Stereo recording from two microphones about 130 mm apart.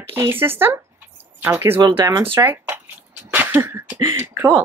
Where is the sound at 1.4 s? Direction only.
15° right (ahead or behind).